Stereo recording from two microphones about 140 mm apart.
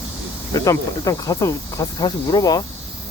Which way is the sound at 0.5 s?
25° left (ahead or behind).